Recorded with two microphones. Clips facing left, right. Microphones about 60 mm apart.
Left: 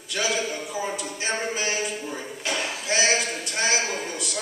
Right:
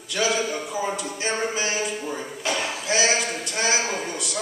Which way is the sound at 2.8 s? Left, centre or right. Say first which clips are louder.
Right 1 dB; centre.